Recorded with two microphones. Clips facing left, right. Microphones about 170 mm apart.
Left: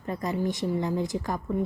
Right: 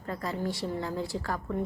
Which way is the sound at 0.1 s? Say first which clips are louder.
Left 4 dB; 20° left (ahead or behind).